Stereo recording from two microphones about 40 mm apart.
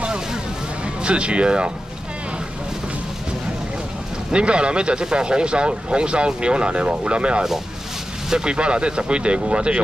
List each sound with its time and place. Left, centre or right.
0.8 s speech: right
4.3 s speech: right